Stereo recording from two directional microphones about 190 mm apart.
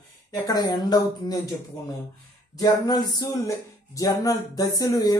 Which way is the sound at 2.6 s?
20° left (ahead or behind).